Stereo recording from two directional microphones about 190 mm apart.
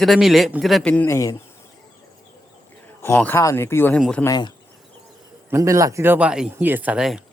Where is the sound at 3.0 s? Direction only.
10° left (ahead or behind).